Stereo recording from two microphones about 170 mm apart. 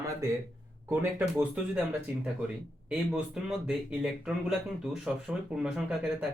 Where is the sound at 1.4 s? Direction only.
5° right (ahead or behind).